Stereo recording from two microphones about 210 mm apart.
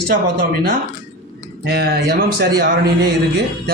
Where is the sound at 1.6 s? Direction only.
50° right (ahead or behind).